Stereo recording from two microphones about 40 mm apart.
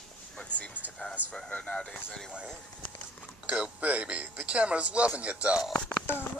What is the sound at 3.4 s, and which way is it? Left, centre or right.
Music, right.